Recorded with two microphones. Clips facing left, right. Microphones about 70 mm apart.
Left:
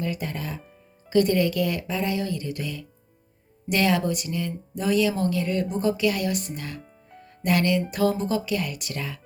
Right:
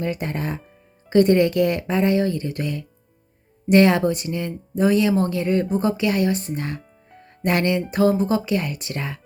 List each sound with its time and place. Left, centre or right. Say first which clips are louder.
0.0 s speech: right 4 dB; right